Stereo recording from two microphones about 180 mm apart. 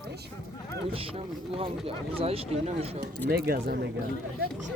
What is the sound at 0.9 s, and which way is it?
Speech, 30° right (ahead or behind).